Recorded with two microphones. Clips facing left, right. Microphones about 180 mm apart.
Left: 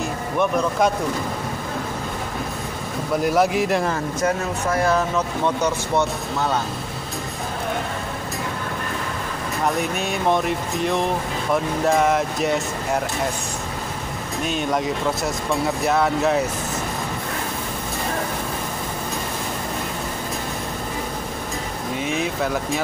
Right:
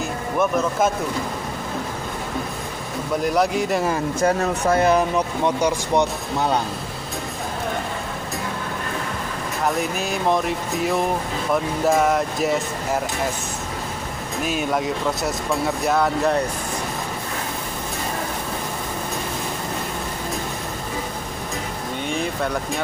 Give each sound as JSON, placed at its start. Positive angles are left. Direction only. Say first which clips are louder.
{"t": 0.4, "sound": "speech", "louder": "even", "side_deg": -5}
{"t": 3.3, "sound": "speech", "louder": "left 1 dB", "side_deg": 0}
{"t": 4.2, "sound": "speech", "louder": "right 3 dB", "side_deg": -30}
{"t": 4.8, "sound": "speech", "louder": "right 2 dB", "side_deg": -15}
{"t": 9.8, "sound": "speech", "louder": "even", "side_deg": 0}
{"t": 14.4, "sound": "speech", "louder": "even", "side_deg": -5}
{"t": 22.0, "sound": "speech", "louder": "left 1 dB", "side_deg": 5}